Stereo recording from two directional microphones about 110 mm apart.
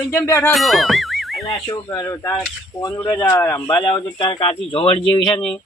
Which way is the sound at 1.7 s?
35° left (ahead or behind).